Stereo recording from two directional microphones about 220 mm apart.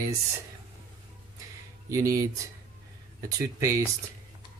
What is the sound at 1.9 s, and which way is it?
Speech, 15° right (ahead or behind).